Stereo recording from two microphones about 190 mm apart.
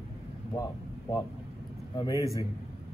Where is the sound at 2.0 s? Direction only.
15° left (ahead or behind).